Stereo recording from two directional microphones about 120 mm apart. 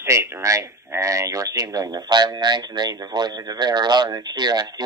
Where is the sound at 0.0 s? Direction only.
25° right (ahead or behind).